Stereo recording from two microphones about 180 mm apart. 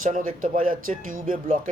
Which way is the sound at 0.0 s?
45° right (ahead or behind).